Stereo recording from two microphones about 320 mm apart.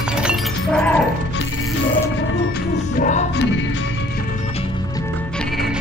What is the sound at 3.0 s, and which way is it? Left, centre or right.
Music, left.